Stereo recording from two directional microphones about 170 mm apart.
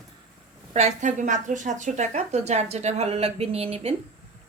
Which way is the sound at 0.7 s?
45° right (ahead or behind).